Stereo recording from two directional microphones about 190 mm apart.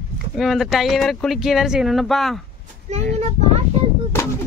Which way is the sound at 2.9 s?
35° right (ahead or behind).